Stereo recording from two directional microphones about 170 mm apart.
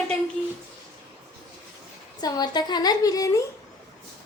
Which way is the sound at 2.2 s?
25° left (ahead or behind).